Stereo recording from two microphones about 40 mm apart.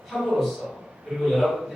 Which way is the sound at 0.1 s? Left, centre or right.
Centre.